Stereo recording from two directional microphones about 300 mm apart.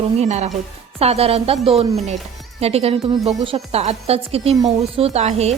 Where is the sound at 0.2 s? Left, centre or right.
Right.